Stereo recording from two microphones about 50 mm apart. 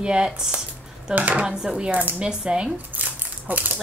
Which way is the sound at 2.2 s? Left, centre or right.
Centre.